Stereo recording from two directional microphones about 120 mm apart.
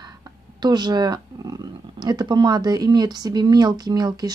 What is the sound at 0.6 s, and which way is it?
Speech, 35° right (ahead or behind).